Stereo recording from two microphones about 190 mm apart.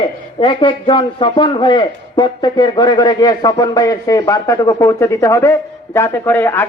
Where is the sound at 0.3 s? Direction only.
25° left (ahead or behind).